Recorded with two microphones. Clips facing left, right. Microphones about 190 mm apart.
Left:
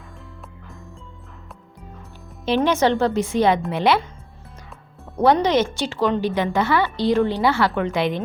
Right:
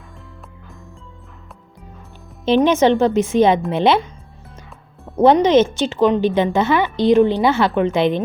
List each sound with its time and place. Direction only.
2.4 s a woman's voice: 20° right (ahead or behind)
5.2 s a woman's voice: 20° right (ahead or behind)